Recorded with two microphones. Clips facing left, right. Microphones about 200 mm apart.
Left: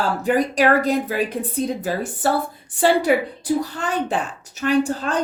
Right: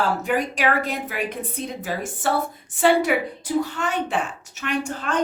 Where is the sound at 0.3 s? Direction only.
35° left (ahead or behind).